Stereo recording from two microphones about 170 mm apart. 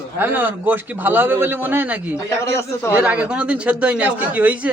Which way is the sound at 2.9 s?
10° right (ahead or behind).